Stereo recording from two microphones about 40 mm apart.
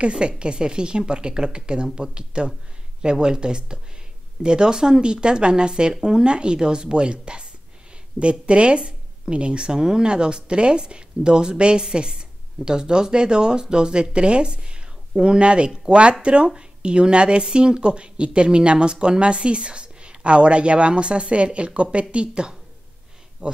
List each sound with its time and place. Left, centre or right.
0.0 s speech: right